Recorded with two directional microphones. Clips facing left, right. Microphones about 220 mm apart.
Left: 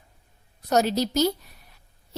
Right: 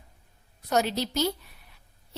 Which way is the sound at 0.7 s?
40° left (ahead or behind).